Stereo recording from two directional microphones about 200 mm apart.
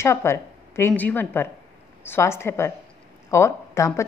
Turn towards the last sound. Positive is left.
turn(degrees=15)  # may be behind; listen again after turning